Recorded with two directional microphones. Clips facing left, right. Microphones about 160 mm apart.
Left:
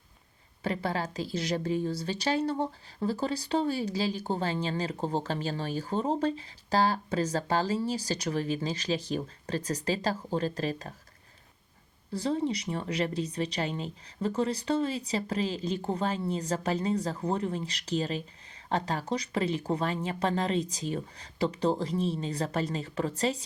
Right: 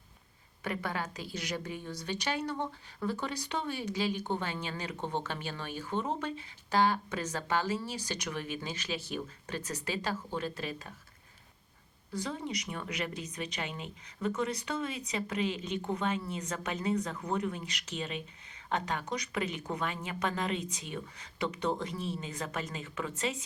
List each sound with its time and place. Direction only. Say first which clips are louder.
0.6 s speech: left 5 dB; 35° left (ahead or behind)
12.1 s speech: left 7 dB; 30° left (ahead or behind)